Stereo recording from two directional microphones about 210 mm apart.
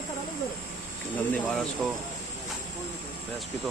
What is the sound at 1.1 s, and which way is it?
Speech, 5° left (ahead or behind).